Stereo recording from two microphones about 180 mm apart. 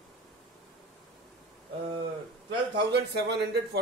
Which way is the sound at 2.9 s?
70° right (ahead or behind).